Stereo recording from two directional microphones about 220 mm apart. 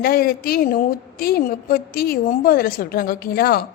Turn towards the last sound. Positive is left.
turn(degrees=45)  # may be behind; listen again after turning